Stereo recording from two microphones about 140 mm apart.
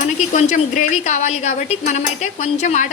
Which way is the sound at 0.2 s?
60° left (ahead or behind).